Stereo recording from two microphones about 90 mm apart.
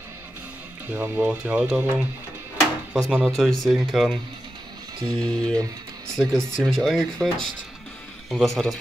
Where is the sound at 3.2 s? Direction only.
Centre (ahead or behind).